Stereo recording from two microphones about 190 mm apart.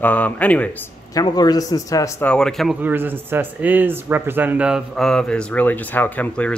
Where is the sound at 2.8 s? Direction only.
10° right (ahead or behind).